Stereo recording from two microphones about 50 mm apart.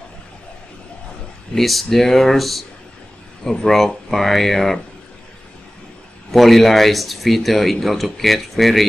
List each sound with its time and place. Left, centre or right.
1.5 s speech: centre
6.3 s speech: centre